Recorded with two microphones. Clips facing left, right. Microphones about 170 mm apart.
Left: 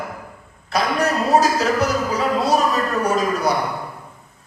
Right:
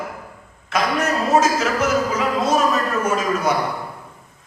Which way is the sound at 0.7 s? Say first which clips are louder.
Left 1 dB; 35° left (ahead or behind).